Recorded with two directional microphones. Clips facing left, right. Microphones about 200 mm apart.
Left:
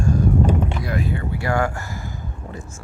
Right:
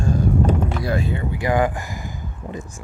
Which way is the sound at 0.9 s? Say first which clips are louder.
Right 1 dB; 25° right (ahead or behind).